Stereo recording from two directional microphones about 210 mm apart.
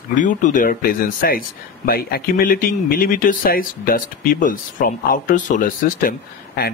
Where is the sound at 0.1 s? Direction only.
40° left (ahead or behind).